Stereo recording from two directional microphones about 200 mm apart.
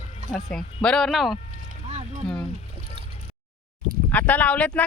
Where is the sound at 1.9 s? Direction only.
35° right (ahead or behind).